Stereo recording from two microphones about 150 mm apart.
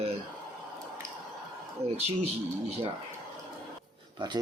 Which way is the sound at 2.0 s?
45° right (ahead or behind).